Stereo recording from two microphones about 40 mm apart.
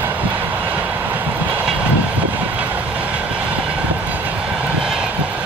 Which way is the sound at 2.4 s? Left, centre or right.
Right.